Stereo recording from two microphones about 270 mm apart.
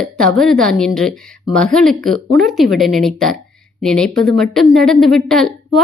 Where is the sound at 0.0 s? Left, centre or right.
Centre.